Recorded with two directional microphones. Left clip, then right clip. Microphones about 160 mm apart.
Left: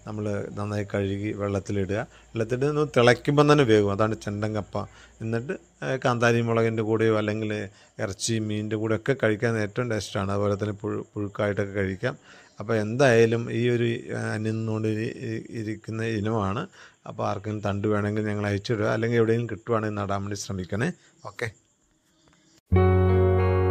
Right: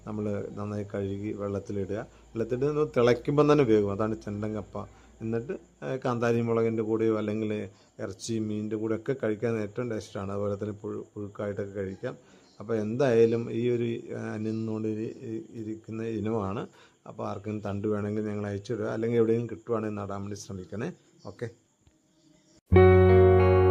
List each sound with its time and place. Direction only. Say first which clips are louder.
0.0 s speech: left 2 dB; 10° left (ahead or behind); by 20.9 s 35° left (ahead or behind)
22.7 s music: right 5 dB; centre (ahead or behind)